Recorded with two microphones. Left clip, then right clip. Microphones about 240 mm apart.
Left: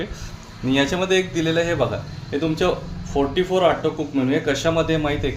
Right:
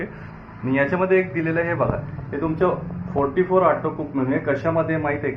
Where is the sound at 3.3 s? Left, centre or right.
Left.